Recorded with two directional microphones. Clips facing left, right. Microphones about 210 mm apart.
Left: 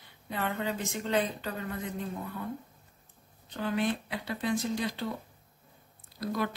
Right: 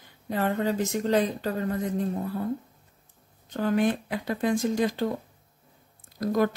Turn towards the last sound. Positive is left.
turn(degrees=-45)  # may be behind; listen again after turning